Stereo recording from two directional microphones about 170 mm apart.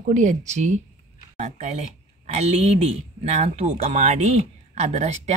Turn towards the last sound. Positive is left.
turn(degrees=-40)  # may be behind; listen again after turning